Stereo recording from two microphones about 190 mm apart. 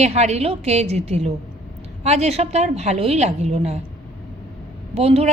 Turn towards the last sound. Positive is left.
turn(degrees=-35)  # may be behind; listen again after turning